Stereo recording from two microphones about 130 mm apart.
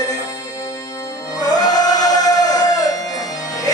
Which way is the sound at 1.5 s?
30° left (ahead or behind).